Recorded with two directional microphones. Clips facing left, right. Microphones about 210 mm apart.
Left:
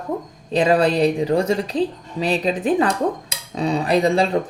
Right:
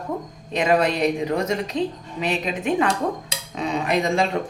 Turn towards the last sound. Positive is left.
turn(degrees=35)  # may be behind; listen again after turning